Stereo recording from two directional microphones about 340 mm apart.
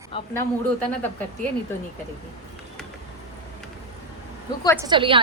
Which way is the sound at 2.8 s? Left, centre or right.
Centre.